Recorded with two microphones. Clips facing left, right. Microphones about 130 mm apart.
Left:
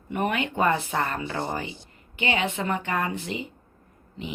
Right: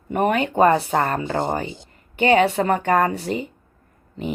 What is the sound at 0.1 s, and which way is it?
Speech, 45° right (ahead or behind).